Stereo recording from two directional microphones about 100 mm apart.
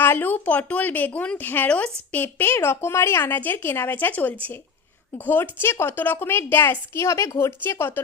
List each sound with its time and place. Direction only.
0.0 s a woman's voice: 20° left (ahead or behind)